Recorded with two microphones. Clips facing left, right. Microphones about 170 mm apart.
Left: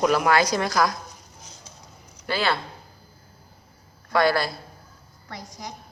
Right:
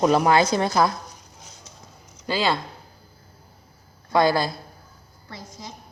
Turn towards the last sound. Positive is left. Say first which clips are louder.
# right 2 dB
turn(degrees=-20)  # may be behind; listen again after turning